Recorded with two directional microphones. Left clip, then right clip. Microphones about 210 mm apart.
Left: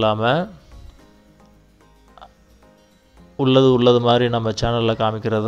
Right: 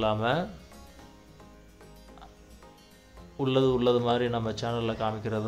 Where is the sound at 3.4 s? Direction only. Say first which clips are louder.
Left 10 dB; 30° left (ahead or behind).